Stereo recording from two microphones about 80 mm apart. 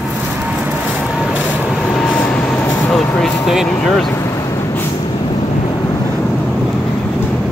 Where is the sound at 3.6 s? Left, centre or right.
Centre.